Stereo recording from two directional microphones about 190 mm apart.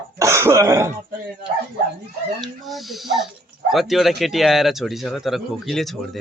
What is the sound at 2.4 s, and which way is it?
Speech, centre (ahead or behind).